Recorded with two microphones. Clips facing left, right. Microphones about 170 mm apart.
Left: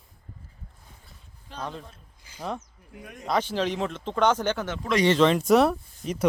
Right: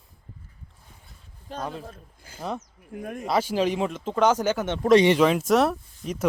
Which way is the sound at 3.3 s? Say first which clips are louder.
Right 2 dB; 10° right (ahead or behind).